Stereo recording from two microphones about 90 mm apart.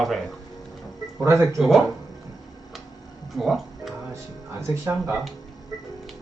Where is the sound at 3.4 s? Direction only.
Centre (ahead or behind).